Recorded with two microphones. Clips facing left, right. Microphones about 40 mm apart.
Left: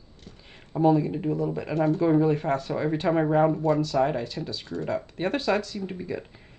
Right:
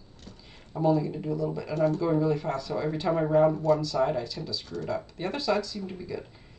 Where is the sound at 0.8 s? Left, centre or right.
Left.